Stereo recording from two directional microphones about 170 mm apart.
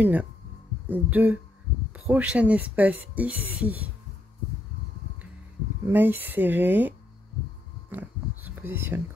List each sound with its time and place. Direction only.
0.0 s speech: 10° right (ahead or behind)
5.9 s speech: 10° right (ahead or behind)
7.9 s a sound: 10° right (ahead or behind)
8.5 s speech: 15° right (ahead or behind)